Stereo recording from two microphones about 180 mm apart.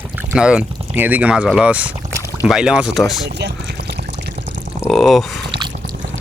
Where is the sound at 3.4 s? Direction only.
70° right (ahead or behind).